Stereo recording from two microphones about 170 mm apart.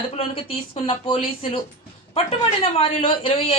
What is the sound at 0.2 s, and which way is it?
A man's voice, 30° left (ahead or behind).